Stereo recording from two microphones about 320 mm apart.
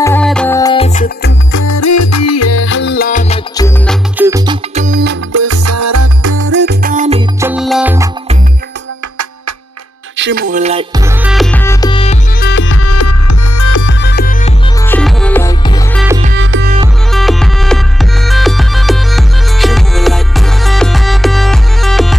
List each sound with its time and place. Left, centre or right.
0.0 s music: centre; by 1.3 s left
1.5 s music: left
3.5 s music: centre
4.3 s music: centre
5.3 s music: right
6.3 s music: right; by 8.1 s centre
10.1 s music: right
11.2 s music: centre
12.4 s music: left
13.8 s music: left
14.9 s music: centre
16.3 s music: right
17.1 s music: centre